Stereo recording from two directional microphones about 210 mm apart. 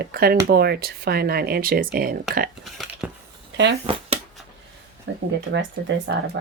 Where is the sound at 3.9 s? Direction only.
25° right (ahead or behind).